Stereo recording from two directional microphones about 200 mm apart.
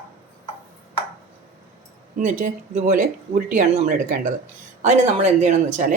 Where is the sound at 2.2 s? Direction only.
40° right (ahead or behind).